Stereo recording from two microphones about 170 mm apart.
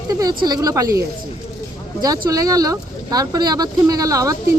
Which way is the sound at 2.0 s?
20° right (ahead or behind).